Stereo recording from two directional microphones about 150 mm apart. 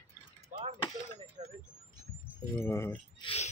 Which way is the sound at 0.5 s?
55° right (ahead or behind).